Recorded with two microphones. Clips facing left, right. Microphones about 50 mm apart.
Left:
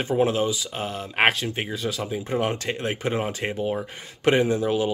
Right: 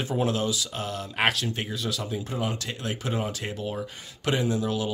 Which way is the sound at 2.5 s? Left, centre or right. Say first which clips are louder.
Left 5 dB; left.